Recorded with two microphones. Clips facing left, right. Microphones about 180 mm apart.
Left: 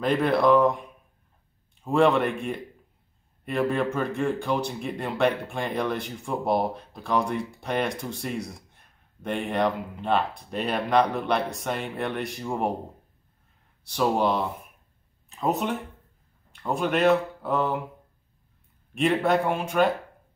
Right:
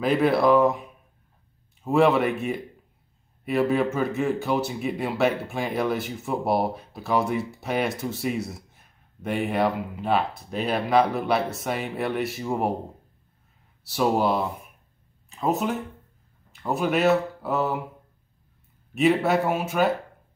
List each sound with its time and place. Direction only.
0.0 s speech: 5° right (ahead or behind)
13.8 s speech: 5° right (ahead or behind)
18.9 s speech: 5° right (ahead or behind)